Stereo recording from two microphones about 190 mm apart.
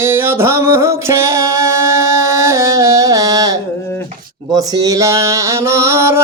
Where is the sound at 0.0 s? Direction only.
10° right (ahead or behind).